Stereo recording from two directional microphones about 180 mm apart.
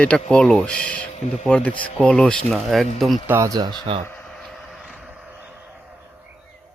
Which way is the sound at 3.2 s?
15° right (ahead or behind).